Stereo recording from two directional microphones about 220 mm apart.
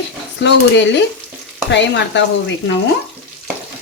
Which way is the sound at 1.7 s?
55° left (ahead or behind).